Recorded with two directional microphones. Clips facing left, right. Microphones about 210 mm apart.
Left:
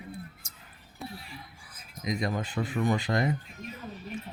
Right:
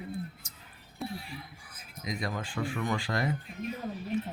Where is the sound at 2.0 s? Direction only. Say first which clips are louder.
Left 4 dB; 20° left (ahead or behind).